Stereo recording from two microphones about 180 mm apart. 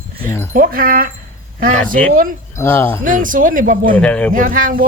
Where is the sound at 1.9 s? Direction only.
5° left (ahead or behind).